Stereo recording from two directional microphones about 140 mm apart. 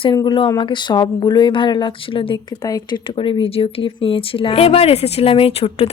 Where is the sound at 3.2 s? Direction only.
40° left (ahead or behind).